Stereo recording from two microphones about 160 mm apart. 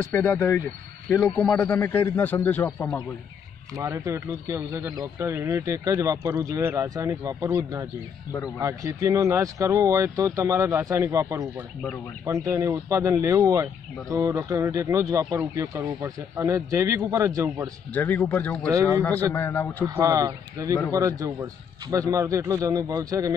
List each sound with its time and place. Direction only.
0.0 s a man's voice: 10° left (ahead or behind)
3.7 s speech: 20° right (ahead or behind)
17.9 s a man's voice: 10° left (ahead or behind)
19.9 s speech: 20° right (ahead or behind)